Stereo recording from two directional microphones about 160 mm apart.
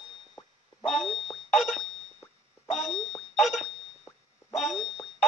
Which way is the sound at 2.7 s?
Centre (ahead or behind).